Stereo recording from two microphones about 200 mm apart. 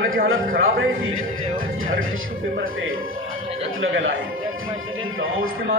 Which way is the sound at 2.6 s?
90° right.